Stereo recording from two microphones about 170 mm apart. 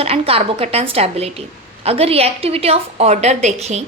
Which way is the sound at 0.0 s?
35° right (ahead or behind).